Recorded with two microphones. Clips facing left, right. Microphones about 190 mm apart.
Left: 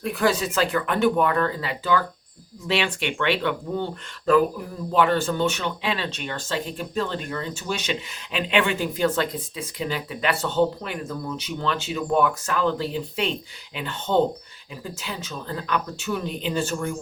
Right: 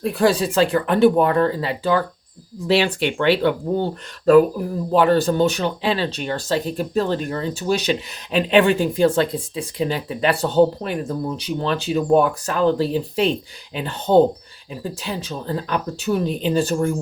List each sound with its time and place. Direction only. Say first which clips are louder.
0.0 s speech: right 5 dB; 30° right (ahead or behind)
4.9 s speech: right 5 dB; 35° right (ahead or behind)